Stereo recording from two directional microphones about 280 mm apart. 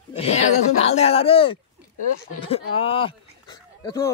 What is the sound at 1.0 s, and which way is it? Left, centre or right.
Speech, left.